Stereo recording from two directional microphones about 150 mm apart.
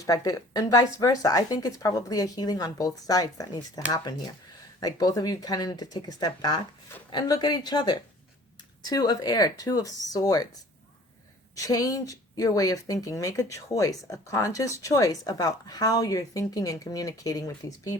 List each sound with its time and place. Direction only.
0.0 s speech: 20° left (ahead or behind)
11.5 s speech: 25° left (ahead or behind)